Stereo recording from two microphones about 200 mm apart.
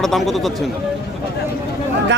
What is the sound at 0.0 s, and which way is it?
Speech, centre (ahead or behind).